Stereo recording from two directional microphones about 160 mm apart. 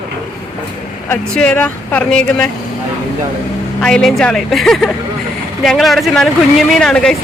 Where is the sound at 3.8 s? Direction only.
5° left (ahead or behind).